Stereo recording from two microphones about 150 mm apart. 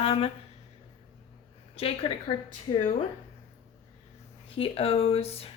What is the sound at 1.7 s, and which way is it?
Speech, 40° left (ahead or behind).